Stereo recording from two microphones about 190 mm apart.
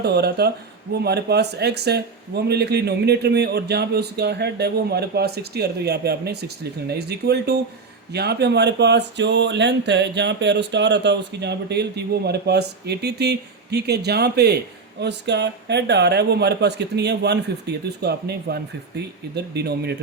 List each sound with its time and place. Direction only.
0.0 s speech: 60° right (ahead or behind)